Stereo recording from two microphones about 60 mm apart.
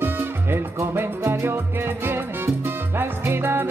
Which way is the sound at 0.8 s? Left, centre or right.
Right.